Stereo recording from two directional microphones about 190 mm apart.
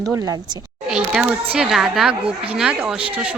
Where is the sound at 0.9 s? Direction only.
5° right (ahead or behind).